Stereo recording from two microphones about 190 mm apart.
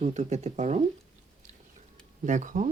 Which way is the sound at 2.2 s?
40° right (ahead or behind).